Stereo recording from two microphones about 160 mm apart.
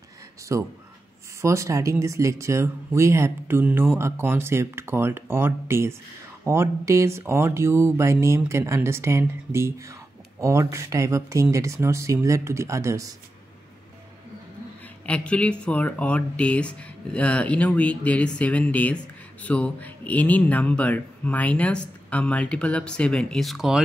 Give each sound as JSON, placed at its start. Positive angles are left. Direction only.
{"t": 0.5, "sound": "speech", "side_deg": -20}
{"t": 15.0, "sound": "speech", "side_deg": 10}